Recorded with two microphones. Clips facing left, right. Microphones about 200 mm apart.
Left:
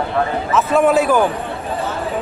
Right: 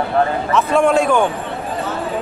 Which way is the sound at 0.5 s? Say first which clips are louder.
Left 1 dB; 5° left (ahead or behind).